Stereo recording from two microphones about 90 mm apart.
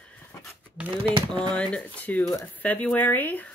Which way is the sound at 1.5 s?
10° left (ahead or behind).